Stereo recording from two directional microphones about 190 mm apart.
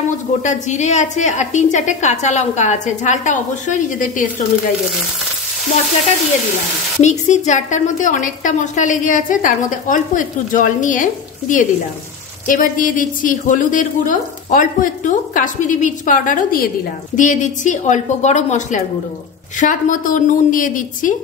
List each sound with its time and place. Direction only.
0.4 s a woman's voice: 40° left (ahead or behind)
7.0 s speech: 40° left (ahead or behind)